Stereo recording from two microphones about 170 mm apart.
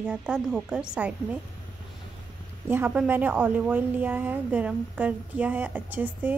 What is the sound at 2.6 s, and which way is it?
A woman's voice, 10° right (ahead or behind).